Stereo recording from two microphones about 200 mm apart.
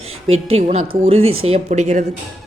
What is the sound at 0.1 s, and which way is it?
Music, 90° right.